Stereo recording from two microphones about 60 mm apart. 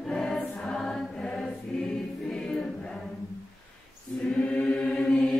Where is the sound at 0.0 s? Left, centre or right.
Centre.